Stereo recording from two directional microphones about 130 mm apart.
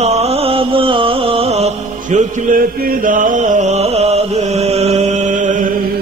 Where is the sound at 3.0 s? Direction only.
85° right; by 5.5 s 70° right (ahead or behind).